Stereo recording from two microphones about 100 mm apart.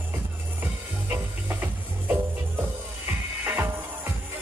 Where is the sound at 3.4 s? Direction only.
20° right (ahead or behind).